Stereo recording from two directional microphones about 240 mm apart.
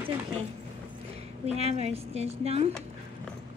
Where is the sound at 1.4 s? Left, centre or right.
Right.